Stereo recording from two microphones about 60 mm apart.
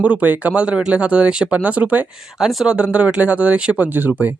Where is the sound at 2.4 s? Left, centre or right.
Centre; by 4.3 s right.